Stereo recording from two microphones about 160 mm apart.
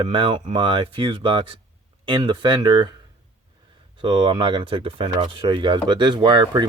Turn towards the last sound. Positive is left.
turn(degrees=-25)  # may be behind; listen again after turning